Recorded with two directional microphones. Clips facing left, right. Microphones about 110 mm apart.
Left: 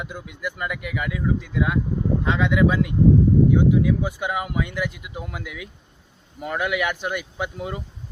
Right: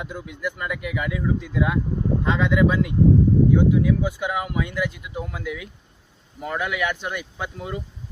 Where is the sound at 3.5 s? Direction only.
15° left (ahead or behind).